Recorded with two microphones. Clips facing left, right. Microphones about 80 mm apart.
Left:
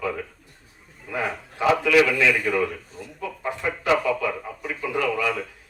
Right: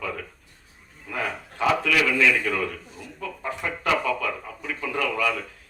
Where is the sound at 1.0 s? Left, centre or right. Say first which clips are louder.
Left 2 dB; centre.